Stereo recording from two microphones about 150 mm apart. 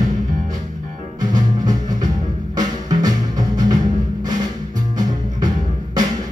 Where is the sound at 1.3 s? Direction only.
25° right (ahead or behind).